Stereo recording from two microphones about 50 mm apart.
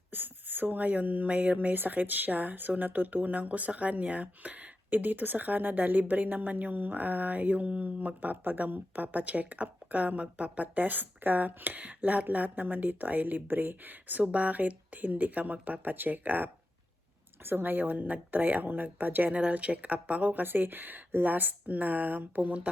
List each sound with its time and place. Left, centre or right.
0.1 s speech: right
20.4 s speech: right